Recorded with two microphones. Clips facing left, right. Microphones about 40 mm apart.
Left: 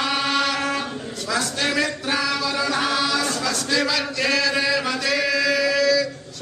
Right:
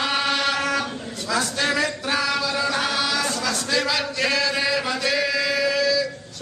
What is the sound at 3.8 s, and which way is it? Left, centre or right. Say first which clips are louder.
Chant: left 1 dB; centre.